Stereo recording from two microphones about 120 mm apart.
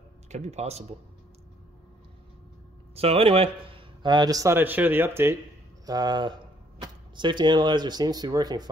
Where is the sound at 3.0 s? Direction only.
55° right (ahead or behind); by 4.5 s 30° right (ahead or behind).